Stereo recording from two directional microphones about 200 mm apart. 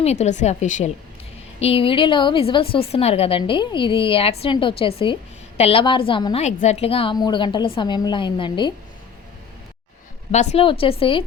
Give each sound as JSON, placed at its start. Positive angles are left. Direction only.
{"t": 0.0, "sound": "a woman's voice", "side_deg": 35}
{"t": 1.6, "sound": "a woman's voice", "side_deg": 25}
{"t": 10.3, "sound": "a woman's voice", "side_deg": 35}